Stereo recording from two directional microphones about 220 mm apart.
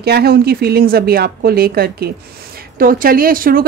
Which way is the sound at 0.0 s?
45° right (ahead or behind).